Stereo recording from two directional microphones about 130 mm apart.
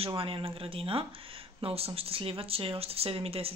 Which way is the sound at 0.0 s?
45° right (ahead or behind).